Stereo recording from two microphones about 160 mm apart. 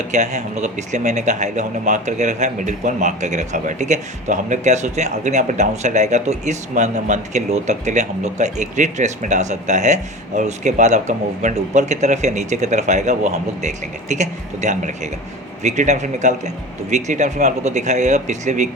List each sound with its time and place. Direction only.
0.1 s a man's voice: 45° right (ahead or behind)